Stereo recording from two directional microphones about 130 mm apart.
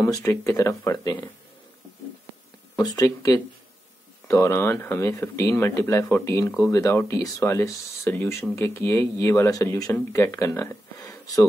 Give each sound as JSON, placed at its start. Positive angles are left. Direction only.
{"t": 0.0, "sound": "speech", "side_deg": 20}
{"t": 2.7, "sound": "speech", "side_deg": 25}